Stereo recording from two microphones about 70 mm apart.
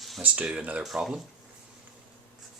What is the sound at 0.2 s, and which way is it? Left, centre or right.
Speech, centre.